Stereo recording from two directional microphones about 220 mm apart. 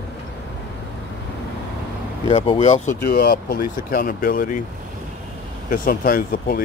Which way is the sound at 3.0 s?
45° left (ahead or behind).